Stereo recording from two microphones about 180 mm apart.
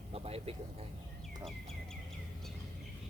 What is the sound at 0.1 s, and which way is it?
Vehicle, 35° right (ahead or behind).